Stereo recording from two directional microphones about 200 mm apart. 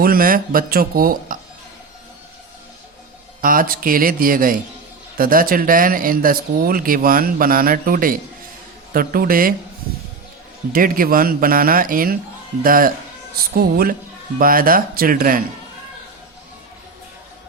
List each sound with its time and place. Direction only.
0.0 s speech: 45° right (ahead or behind)
3.4 s speech: 45° right (ahead or behind)
10.7 s speech: 45° right (ahead or behind)